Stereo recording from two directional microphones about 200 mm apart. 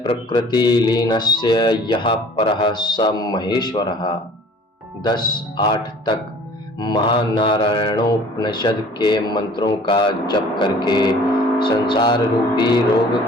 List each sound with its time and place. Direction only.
0.0 s speech: 25° left (ahead or behind)